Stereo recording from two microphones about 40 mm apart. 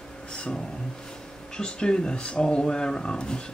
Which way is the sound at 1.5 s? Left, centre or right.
Left.